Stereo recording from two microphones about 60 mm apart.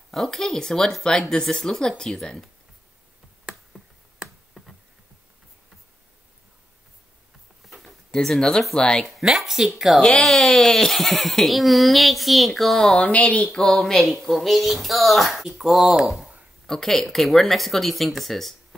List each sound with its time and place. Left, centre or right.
0.1 s speech: centre
7.6 s a sound: centre
8.7 s speech: centre
9.0 s speech: centre
9.9 s speech: centre
12.9 s speech: left
13.7 s speech: centre
16.6 s speech: centre